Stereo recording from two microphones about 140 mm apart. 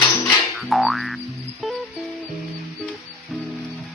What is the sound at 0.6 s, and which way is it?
Boing, centre (ahead or behind).